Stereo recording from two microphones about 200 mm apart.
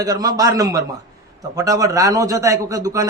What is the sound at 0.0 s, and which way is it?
A man's voice, 20° right (ahead or behind).